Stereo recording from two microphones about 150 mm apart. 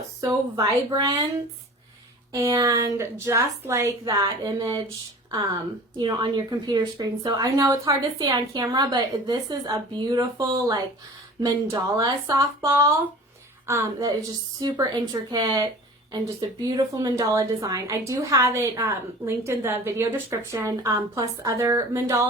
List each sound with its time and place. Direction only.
0.2 s a woman's voice: 25° right (ahead or behind)
2.3 s a woman's voice: 20° right (ahead or behind)
6.0 s a woman's voice: 30° right (ahead or behind)